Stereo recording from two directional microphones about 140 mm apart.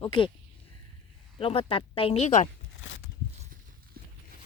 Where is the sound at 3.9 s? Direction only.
90° right.